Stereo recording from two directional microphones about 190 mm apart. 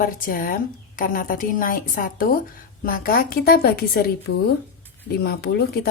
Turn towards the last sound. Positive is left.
turn(degrees=55)  # may be behind; listen again after turning